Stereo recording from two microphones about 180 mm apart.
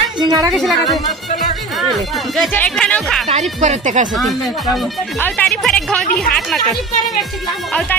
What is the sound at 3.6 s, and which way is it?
Speech, 40° right (ahead or behind).